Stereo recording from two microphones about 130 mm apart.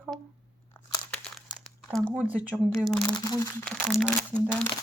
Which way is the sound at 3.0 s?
30° left (ahead or behind).